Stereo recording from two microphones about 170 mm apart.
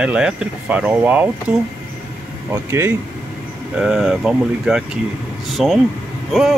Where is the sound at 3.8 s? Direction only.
5° right (ahead or behind).